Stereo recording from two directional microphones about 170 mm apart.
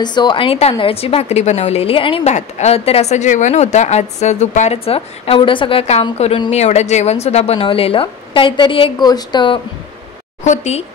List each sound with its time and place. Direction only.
0.0 s a woman's voice: 25° left (ahead or behind)
10.4 s a woman's voice: 45° left (ahead or behind)